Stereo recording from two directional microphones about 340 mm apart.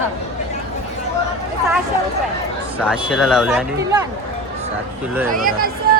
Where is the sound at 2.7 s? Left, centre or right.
Centre.